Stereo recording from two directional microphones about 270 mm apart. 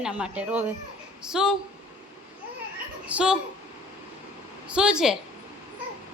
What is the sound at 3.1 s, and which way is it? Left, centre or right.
Speech, centre.